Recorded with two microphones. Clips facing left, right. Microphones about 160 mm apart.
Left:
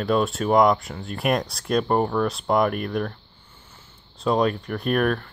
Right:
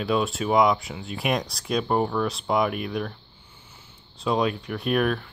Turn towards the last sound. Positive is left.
turn(degrees=-5)  # may be behind; listen again after turning